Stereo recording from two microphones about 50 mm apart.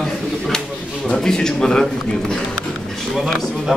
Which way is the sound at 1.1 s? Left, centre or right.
Centre.